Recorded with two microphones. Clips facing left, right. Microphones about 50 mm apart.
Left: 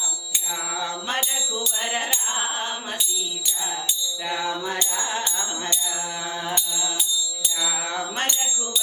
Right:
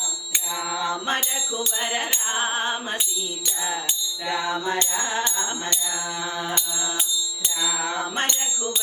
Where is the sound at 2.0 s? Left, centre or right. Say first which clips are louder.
Right 1 dB; right.